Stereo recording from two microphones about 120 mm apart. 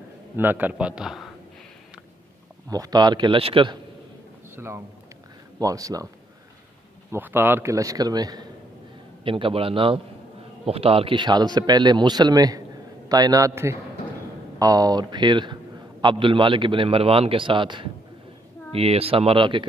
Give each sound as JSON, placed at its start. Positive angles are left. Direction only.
{"t": 0.4, "sound": "a man's voice", "side_deg": -15}
{"t": 2.7, "sound": "a man's voice", "side_deg": -35}
{"t": 4.6, "sound": "a man's voice", "side_deg": -20}
{"t": 7.1, "sound": "a man's voice", "side_deg": -20}
{"t": 9.2, "sound": "a man's voice", "side_deg": -50}
{"t": 18.7, "sound": "a man's voice", "side_deg": -55}